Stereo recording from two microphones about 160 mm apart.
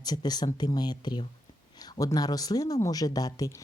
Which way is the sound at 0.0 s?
25° left (ahead or behind).